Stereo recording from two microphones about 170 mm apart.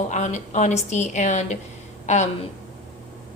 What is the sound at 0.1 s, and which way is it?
A woman's voice, 45° left (ahead or behind).